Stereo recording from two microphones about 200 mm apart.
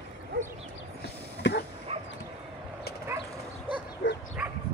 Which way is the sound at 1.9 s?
30° right (ahead or behind).